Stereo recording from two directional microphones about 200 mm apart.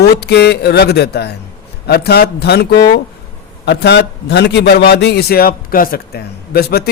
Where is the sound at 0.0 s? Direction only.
55° left (ahead or behind).